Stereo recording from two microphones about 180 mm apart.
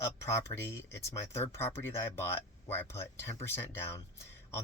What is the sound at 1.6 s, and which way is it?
A man's voice, 15° left (ahead or behind).